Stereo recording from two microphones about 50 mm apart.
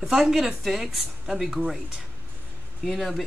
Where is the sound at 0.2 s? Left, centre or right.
Centre.